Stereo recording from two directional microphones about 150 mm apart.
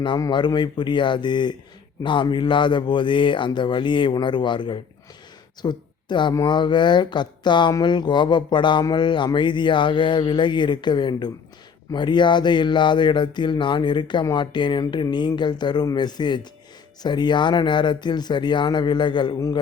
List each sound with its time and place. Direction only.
0.0 s speech: 30° left (ahead or behind)